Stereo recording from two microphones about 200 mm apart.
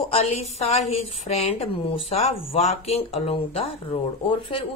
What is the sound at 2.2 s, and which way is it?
A woman's voice, 35° left (ahead or behind).